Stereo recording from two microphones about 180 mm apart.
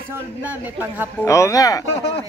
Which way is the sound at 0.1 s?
10° right (ahead or behind).